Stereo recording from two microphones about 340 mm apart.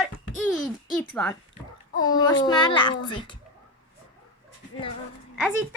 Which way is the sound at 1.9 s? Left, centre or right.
Left.